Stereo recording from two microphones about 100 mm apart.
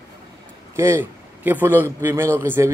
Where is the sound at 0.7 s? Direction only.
25° right (ahead or behind).